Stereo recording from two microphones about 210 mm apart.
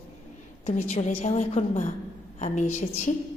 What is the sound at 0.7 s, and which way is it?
A woman's voice, 30° left (ahead or behind).